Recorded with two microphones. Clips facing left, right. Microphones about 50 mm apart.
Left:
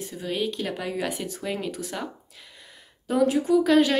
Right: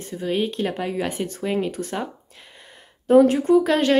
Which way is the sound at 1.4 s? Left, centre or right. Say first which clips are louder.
Right 7 dB; right.